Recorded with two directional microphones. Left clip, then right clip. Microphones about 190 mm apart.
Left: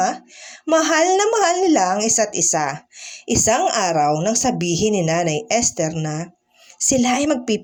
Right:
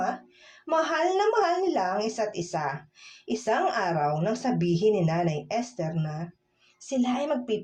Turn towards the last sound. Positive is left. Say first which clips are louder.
# left 9 dB
turn(degrees=35)  # may be behind; listen again after turning